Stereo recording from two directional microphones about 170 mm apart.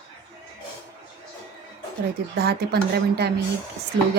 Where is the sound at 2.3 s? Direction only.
70° right (ahead or behind).